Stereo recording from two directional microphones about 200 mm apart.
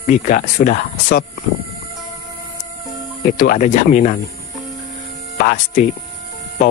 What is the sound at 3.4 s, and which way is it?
Speech, 40° left (ahead or behind).